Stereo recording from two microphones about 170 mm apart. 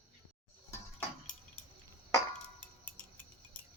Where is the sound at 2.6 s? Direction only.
10° left (ahead or behind).